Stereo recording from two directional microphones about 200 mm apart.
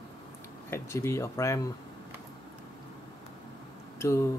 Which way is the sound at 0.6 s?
15° left (ahead or behind).